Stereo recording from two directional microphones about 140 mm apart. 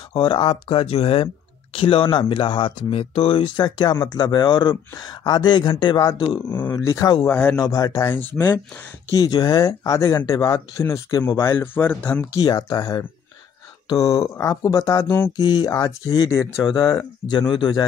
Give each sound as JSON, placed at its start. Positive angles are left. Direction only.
{"t": 0.1, "sound": "speech", "side_deg": 35}
{"t": 6.5, "sound": "speech", "side_deg": 15}
{"t": 7.6, "sound": "speech", "side_deg": 25}
{"t": 9.1, "sound": "speech", "side_deg": 30}
{"t": 11.3, "sound": "speech", "side_deg": 15}
{"t": 12.4, "sound": "speech", "side_deg": 25}